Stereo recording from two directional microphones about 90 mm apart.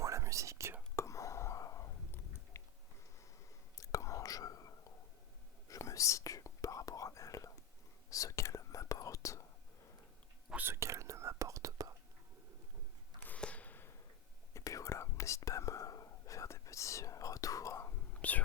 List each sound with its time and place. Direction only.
0.0 s whispering: 35° right (ahead or behind)
0.9 s chewing: 35° left (ahead or behind)
3.8 s whispering: 35° left (ahead or behind)
10.5 s whispering: 25° right (ahead or behind)
13.2 s sniff: 15° left (ahead or behind)
14.5 s whispering: 35° left (ahead or behind)
18.1 s whispering: 15° left (ahead or behind)